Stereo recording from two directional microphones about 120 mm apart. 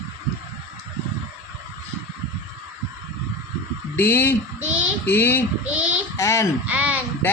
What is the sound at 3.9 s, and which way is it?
Speech, 15° left (ahead or behind).